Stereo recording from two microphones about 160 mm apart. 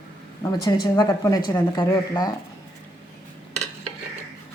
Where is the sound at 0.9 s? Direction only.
20° left (ahead or behind).